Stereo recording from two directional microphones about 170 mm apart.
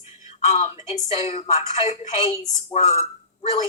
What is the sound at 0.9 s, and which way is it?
Speech, 40° left (ahead or behind).